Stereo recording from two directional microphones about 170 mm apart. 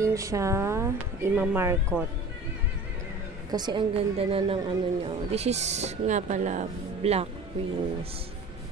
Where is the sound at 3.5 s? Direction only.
25° right (ahead or behind); by 7.2 s 40° right (ahead or behind).